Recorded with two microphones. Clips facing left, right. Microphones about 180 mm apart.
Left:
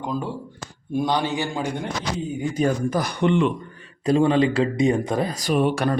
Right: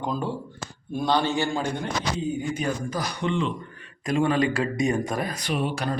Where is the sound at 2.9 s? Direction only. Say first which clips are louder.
Left 6 dB; 55° left (ahead or behind).